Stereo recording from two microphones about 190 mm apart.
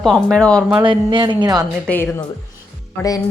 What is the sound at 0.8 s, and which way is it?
Speech, 25° right (ahead or behind).